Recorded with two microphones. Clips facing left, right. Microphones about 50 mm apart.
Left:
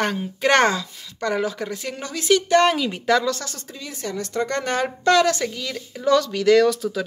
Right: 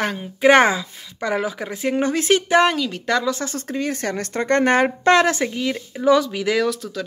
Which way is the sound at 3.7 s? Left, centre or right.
Right.